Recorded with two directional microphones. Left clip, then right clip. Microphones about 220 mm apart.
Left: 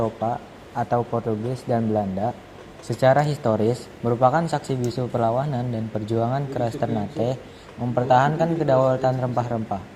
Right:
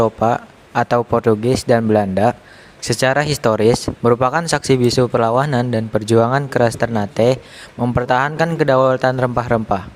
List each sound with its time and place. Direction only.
0.0 s speech: 70° right (ahead or behind); by 9.3 s 45° right (ahead or behind)